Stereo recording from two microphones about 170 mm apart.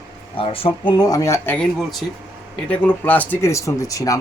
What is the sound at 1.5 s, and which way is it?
Speech, centre (ahead or behind).